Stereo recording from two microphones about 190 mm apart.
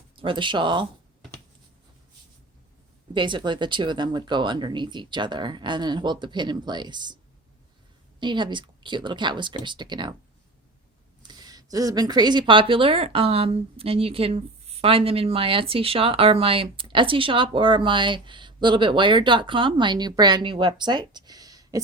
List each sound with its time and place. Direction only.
0.2 s speech: 25° right (ahead or behind)
3.2 s speech: 25° right (ahead or behind)
8.2 s speech: 25° right (ahead or behind)
11.2 s speech: 20° right (ahead or behind)